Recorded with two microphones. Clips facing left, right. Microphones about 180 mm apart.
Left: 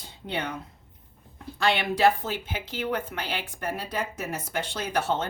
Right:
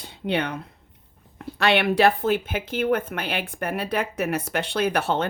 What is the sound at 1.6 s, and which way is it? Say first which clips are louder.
A woman's voice: right 4 dB; 65° right (ahead or behind).